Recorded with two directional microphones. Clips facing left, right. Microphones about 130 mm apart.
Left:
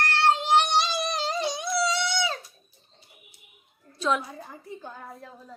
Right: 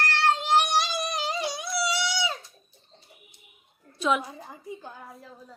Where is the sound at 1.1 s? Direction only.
10° right (ahead or behind).